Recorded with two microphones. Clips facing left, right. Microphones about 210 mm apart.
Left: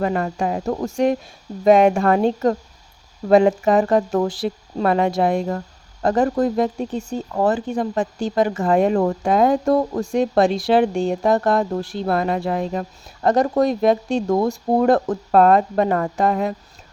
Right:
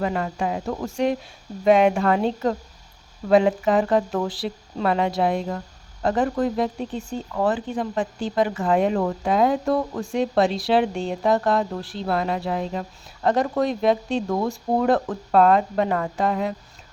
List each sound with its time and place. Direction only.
0.0 s speech: 45° left (ahead or behind)